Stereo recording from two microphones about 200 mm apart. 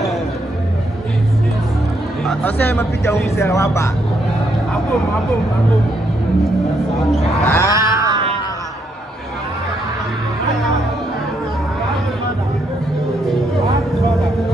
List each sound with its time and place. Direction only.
2.2 s speech: 10° left (ahead or behind)
7.4 s speech: 15° left (ahead or behind)
7.7 s cat: 15° right (ahead or behind)